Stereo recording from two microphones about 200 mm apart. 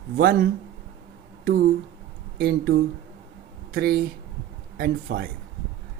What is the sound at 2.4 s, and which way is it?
Speech, 50° right (ahead or behind).